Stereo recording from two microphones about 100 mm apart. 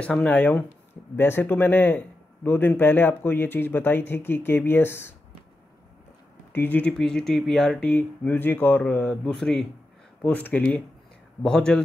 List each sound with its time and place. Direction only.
0.0 s a man's voice: 10° left (ahead or behind)
6.5 s speech: 15° left (ahead or behind)
6.9 s speech: 5° left (ahead or behind)
7.8 s speech: 15° left (ahead or behind)